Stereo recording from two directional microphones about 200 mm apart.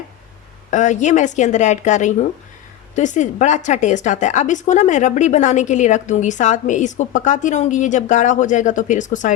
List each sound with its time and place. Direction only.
0.7 s a woman's voice: 35° left (ahead or behind)